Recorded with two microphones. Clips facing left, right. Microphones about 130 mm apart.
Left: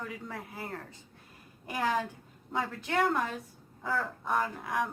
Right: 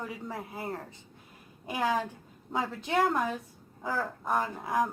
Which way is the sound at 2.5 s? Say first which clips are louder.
Right 2 dB; 20° right (ahead or behind).